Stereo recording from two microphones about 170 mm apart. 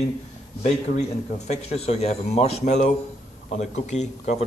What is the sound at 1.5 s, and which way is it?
A man's voice, 40° left (ahead or behind).